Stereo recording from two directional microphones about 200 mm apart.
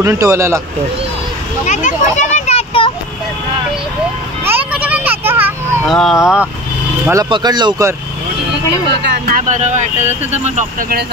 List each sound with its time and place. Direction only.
0.0 s a man's voice: 15° right (ahead or behind)
1.7 s children playing: 40° left (ahead or behind)
4.5 s a sound: 5° right (ahead or behind)
5.9 s speech: centre (ahead or behind)
7.1 s speech: 20° right (ahead or behind)
9.5 s speech: 35° right (ahead or behind)